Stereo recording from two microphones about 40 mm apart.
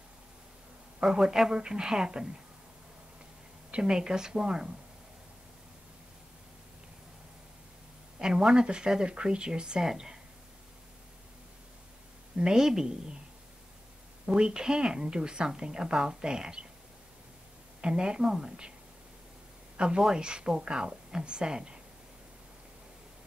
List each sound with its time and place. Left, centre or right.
1.0 s a woman's voice: centre
3.7 s a woman's voice: centre
8.2 s a woman's voice: centre
12.4 s a woman's voice: centre
14.2 s a woman's voice: right
17.8 s a woman's voice: right
20.0 s a woman's voice: centre